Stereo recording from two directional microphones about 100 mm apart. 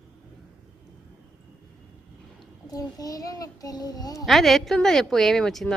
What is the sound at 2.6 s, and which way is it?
A child's voice, 40° left (ahead or behind).